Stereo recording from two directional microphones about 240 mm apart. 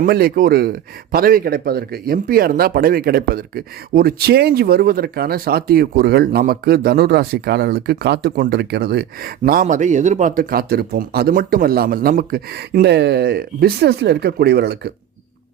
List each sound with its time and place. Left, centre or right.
0.0 s speech: right